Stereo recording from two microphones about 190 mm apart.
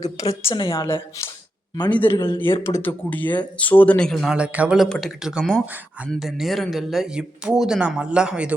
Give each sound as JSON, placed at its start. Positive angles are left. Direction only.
{"t": 0.4, "sound": "a woman's voice", "side_deg": 25}
{"t": 2.4, "sound": "speech", "side_deg": 15}